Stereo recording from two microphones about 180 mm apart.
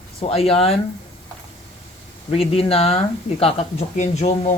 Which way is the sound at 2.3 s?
35° left (ahead or behind).